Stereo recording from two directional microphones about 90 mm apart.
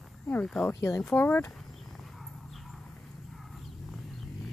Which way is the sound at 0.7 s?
35° left (ahead or behind).